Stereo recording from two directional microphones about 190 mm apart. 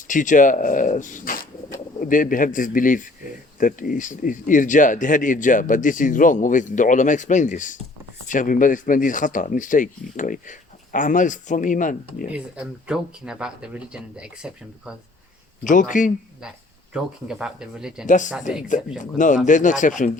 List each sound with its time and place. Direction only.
0.1 s a man's voice: 45° left (ahead or behind)
12.3 s speech: 5° right (ahead or behind)
15.6 s a man's voice: 45° left (ahead or behind)
16.9 s speech: 5° right (ahead or behind)
18.0 s a man's voice: 40° left (ahead or behind)